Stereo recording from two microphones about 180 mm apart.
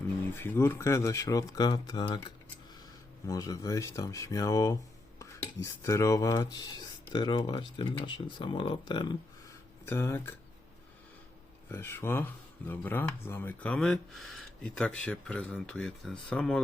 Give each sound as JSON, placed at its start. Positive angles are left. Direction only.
{"t": 0.3, "sound": "speech", "side_deg": 10}
{"t": 3.2, "sound": "speech", "side_deg": 20}
{"t": 9.8, "sound": "speech", "side_deg": 15}
{"t": 11.7, "sound": "speech", "side_deg": 15}